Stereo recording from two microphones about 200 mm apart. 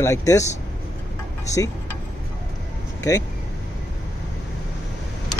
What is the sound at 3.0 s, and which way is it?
Speech, 15° left (ahead or behind).